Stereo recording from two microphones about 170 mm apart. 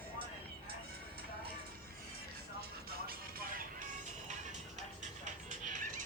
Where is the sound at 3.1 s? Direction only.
60° right (ahead or behind).